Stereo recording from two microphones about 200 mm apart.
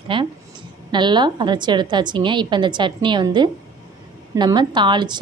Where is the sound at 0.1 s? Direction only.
25° right (ahead or behind).